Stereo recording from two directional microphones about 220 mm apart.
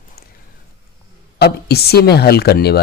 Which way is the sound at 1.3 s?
45° left (ahead or behind).